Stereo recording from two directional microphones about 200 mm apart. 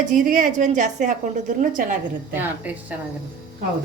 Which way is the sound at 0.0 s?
40° right (ahead or behind).